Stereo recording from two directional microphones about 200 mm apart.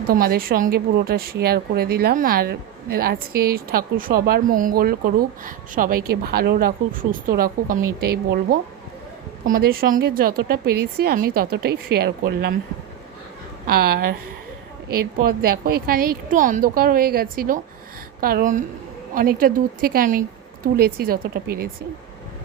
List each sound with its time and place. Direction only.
0.1 s a woman's voice: 45° right (ahead or behind)
13.7 s a woman's voice: 50° right (ahead or behind)
15.3 s a woman's voice: 50° right (ahead or behind)